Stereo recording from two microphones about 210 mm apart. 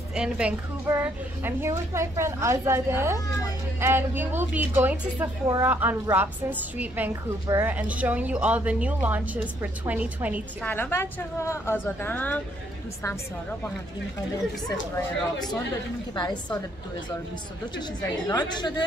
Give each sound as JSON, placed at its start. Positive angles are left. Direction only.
{"t": 0.1, "sound": "a woman's voice", "side_deg": -5}
{"t": 10.6, "sound": "a woman's voice", "side_deg": 10}
{"t": 15.0, "sound": "speech", "side_deg": 5}
{"t": 18.3, "sound": "speech", "side_deg": 20}